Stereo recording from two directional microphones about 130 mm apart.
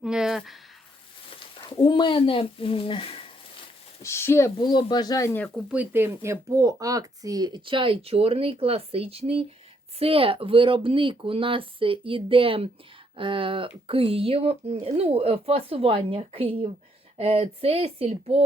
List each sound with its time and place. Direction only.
0.0 s speech: 5° right (ahead or behind)
1.8 s speech: 40° left (ahead or behind)
4.0 s speech: 20° left (ahead or behind)
4.6 s speech: 35° left (ahead or behind)
5.7 s speech: 15° right (ahead or behind); by 18.4 s 50° right (ahead or behind)